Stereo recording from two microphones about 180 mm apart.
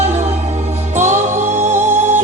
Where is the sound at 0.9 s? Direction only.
40° right (ahead or behind).